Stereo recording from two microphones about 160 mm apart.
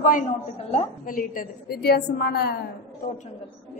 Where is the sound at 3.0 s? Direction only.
60° left (ahead or behind).